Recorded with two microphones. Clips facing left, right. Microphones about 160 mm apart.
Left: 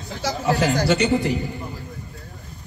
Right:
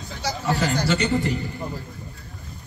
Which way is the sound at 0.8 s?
20° left (ahead or behind).